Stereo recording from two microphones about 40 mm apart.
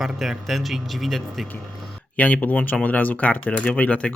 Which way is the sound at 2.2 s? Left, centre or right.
Left.